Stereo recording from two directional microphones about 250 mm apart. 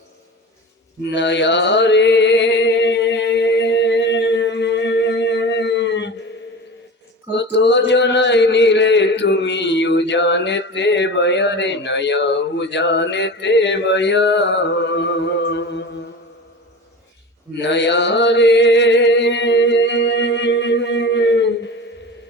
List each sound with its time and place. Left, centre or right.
1.1 s mantra: left
7.3 s a sound: left
15.4 s music: left
17.6 s mantra: left